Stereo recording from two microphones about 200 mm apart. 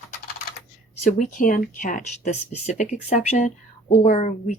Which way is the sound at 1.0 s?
40° left (ahead or behind).